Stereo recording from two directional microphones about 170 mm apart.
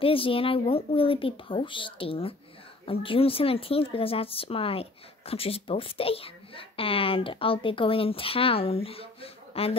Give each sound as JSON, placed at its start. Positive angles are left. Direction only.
{"t": 0.0, "sound": "a woman's voice", "side_deg": 30}